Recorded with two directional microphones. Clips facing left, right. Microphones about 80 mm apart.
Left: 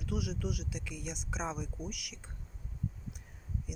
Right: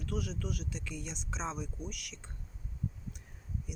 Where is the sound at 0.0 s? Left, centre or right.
Centre.